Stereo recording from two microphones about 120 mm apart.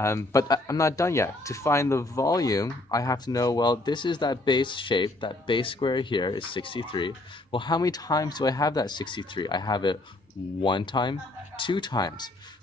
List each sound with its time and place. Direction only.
0.0 s speech: 25° left (ahead or behind)